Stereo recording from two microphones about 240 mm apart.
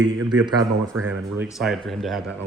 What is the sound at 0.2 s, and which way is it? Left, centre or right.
Speech, right.